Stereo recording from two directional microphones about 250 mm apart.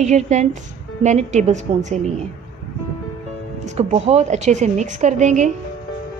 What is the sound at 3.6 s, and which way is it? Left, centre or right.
A woman's voice, right.